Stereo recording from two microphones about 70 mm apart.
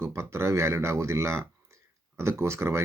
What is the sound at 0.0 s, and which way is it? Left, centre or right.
Speech, right.